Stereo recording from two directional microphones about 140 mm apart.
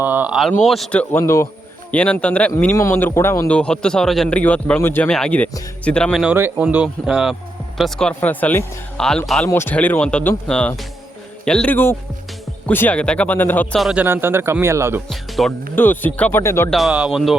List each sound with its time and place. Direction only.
0.0 s speech: 15° right (ahead or behind)
0.6 s speech: centre (ahead or behind)
1.2 s a man's voice: 20° left (ahead or behind)
1.9 s a man's voice: 10° left (ahead or behind)
6.2 s a man's voice: 10° right (ahead or behind); by 9.5 s 5° left (ahead or behind)
9.5 s a man's voice: 15° left (ahead or behind)
13.7 s speech: centre (ahead or behind)
14.0 s speech: 15° right (ahead or behind)
15.1 s speech: centre (ahead or behind)
15.7 s a man's voice: 15° left (ahead or behind)
16.6 s speech: centre (ahead or behind)